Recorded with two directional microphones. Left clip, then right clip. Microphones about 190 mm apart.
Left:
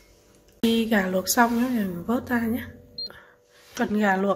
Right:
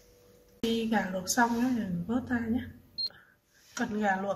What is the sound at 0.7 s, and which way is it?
Speech, 55° left (ahead or behind).